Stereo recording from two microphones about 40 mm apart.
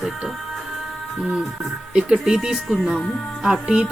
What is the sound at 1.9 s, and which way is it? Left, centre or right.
Speech, centre.